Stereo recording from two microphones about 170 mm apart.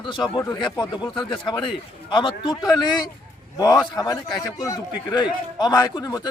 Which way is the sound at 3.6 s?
25° left (ahead or behind).